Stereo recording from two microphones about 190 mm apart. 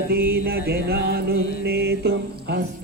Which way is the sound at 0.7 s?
55° right (ahead or behind).